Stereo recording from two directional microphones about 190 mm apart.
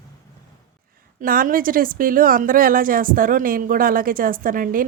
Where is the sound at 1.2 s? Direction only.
45° right (ahead or behind).